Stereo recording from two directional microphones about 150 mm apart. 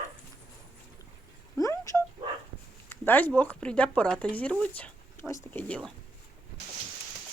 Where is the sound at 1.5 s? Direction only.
20° left (ahead or behind).